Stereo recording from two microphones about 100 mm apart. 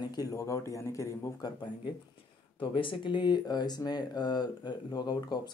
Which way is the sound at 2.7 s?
60° left (ahead or behind).